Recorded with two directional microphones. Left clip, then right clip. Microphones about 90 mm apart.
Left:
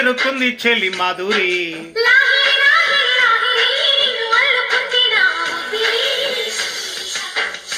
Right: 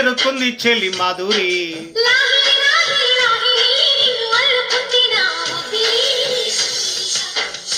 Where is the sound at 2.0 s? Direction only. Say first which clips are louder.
Left 1 dB; 15° right (ahead or behind).